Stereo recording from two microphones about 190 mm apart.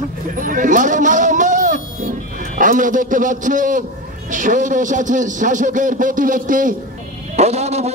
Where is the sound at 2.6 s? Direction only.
45° right (ahead or behind).